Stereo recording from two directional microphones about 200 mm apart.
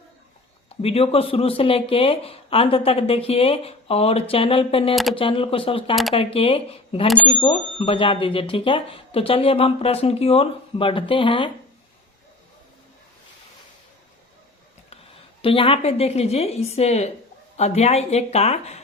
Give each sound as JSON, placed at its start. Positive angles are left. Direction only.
{"t": 0.8, "sound": "speech", "side_deg": 30}
{"t": 15.4, "sound": "a woman's voice", "side_deg": 25}